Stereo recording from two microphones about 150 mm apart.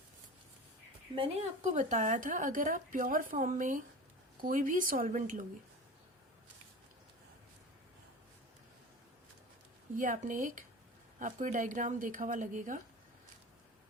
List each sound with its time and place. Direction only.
1.6 s a woman's voice: 50° right (ahead or behind)
10.0 s a woman's voice: 60° right (ahead or behind)